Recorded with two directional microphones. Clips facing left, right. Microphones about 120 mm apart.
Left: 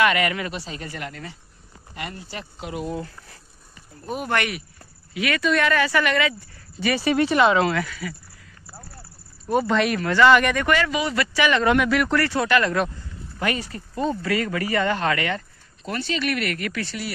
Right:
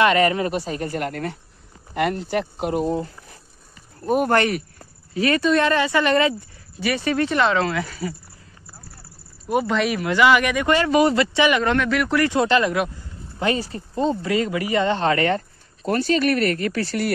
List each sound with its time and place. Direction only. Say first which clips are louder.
0.0 s speech: right 4 dB; 30° right (ahead or behind)
0.5 s speech: right 8 dB; 45° right (ahead or behind)
4.0 s speech: right 7 dB; 45° right (ahead or behind); by 6.1 s 25° right (ahead or behind)
6.8 s speech: even; centre (ahead or behind)
7.1 s speech: left 2 dB; 10° left (ahead or behind)
7.8 s speech: right 3 dB; 30° right (ahead or behind)
9.7 s speech: even; centre (ahead or behind)
10.9 s speech: right 9 dB; 40° right (ahead or behind)
11.1 s speech: right 3 dB; 25° right (ahead or behind)
11.6 s speech: left 1 dB; 5° left (ahead or behind)
12.2 s speech: right 3 dB; 20° right (ahead or behind)